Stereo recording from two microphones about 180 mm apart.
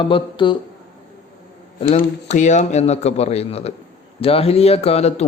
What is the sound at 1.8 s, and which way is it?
A man's voice, 45° left (ahead or behind).